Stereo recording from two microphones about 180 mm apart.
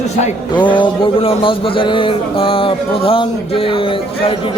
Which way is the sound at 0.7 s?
30° left (ahead or behind).